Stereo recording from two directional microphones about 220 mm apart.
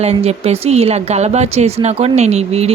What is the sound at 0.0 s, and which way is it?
Speech, 30° right (ahead or behind).